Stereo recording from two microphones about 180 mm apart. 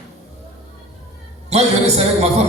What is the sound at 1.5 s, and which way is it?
Speech, 35° right (ahead or behind).